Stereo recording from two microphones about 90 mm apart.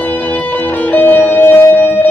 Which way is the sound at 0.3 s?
20° left (ahead or behind).